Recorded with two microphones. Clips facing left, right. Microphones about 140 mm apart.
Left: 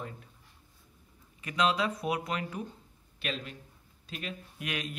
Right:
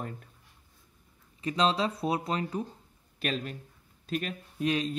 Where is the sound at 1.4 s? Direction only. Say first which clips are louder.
Right 2 dB; 30° right (ahead or behind).